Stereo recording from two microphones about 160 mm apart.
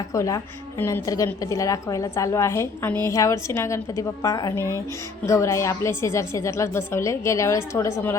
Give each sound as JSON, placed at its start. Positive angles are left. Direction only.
{"t": 0.1, "sound": "a woman's voice", "side_deg": 20}